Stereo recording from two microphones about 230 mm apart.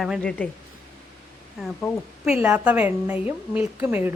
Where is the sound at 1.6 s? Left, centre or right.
Centre.